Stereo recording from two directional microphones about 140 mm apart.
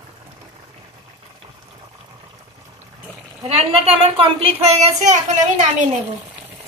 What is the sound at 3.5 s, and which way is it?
A child's voice, 45° right (ahead or behind).